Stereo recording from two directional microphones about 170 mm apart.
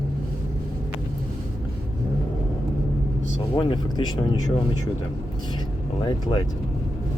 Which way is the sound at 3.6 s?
30° left (ahead or behind).